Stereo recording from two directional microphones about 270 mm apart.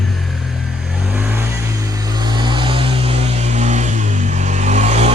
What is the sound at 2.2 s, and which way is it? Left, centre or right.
Vehicle, centre.